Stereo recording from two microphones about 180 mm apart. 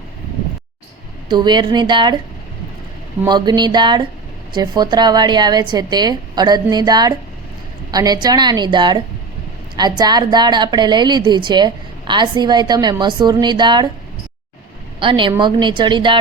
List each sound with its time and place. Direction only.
1.3 s a woman's voice: 25° right (ahead or behind)
3.2 s a woman's voice: 25° right (ahead or behind)
14.9 s a woman's voice: 25° right (ahead or behind)